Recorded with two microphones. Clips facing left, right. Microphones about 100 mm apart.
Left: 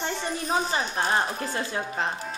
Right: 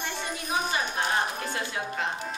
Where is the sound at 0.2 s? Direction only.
35° left (ahead or behind).